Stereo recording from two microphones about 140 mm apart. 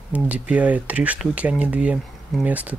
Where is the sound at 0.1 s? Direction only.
10° right (ahead or behind).